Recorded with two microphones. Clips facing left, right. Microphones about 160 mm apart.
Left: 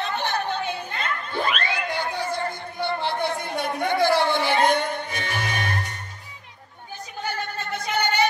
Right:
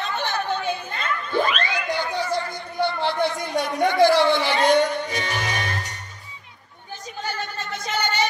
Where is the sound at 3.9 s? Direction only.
50° left (ahead or behind).